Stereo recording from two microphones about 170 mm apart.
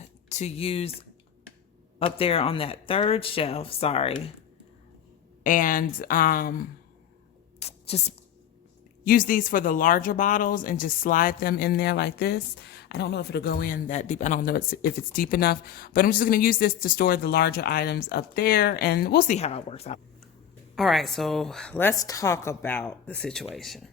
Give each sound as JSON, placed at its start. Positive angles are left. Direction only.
{"t": 0.3, "sound": "speech", "side_deg": 40}
{"t": 2.0, "sound": "speech", "side_deg": 35}
{"t": 5.4, "sound": "speech", "side_deg": 50}
{"t": 7.6, "sound": "a sound", "side_deg": 40}
{"t": 9.0, "sound": "speech", "side_deg": 55}
{"t": 19.4, "sound": "speech", "side_deg": 35}
{"t": 20.7, "sound": "speech", "side_deg": 0}